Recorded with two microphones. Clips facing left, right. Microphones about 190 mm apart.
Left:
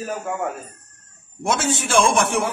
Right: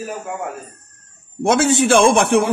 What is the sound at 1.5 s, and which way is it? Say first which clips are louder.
Speech: right 7 dB; 65° right (ahead or behind).